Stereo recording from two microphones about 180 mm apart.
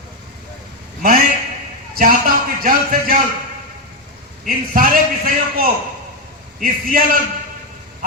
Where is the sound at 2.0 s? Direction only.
55° right (ahead or behind).